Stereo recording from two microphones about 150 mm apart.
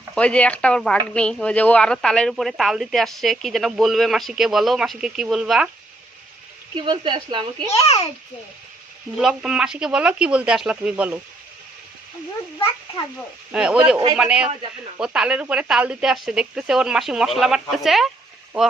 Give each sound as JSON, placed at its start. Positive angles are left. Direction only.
{"t": 0.1, "sound": "speech", "side_deg": 10}
{"t": 6.7, "sound": "speech", "side_deg": -30}
{"t": 7.9, "sound": "a child's voice", "side_deg": 40}
{"t": 9.1, "sound": "speech", "side_deg": -5}
{"t": 13.5, "sound": "speech", "side_deg": -5}